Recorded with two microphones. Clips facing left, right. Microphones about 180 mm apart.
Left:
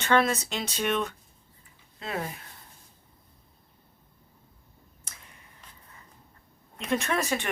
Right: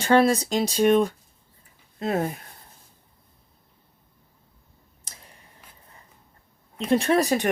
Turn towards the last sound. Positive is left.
turn(degrees=-35)  # may be behind; listen again after turning